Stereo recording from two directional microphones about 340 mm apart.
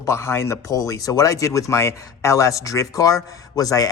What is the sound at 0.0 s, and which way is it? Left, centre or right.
A man's voice, centre.